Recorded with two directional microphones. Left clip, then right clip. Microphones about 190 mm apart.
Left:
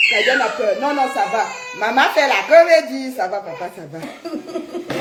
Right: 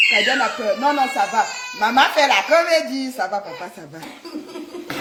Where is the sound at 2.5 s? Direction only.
55° right (ahead or behind).